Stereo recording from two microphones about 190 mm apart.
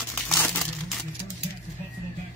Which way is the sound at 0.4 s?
Centre (ahead or behind).